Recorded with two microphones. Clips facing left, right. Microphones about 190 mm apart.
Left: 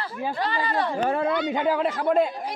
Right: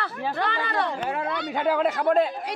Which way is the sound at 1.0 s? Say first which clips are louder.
Left 5 dB; 35° left (ahead or behind).